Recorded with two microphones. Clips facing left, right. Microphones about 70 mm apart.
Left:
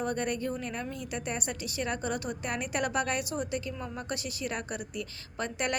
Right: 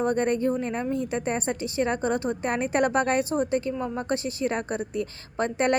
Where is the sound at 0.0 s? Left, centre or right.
Right.